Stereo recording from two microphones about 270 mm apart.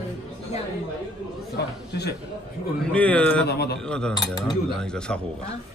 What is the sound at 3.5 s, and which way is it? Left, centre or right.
Speech, left.